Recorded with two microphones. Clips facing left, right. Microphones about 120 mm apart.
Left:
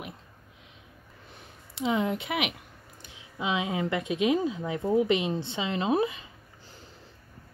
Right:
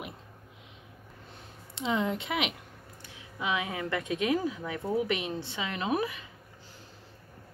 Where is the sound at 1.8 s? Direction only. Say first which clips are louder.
Left 2 dB; 10° left (ahead or behind).